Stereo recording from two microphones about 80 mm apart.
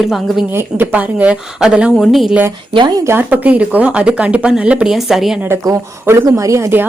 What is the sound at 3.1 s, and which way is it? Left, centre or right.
Speech, right.